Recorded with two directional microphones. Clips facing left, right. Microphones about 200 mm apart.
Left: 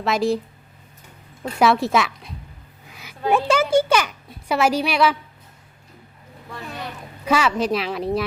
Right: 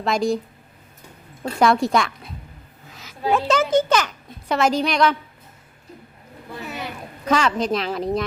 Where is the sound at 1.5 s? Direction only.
5° left (ahead or behind).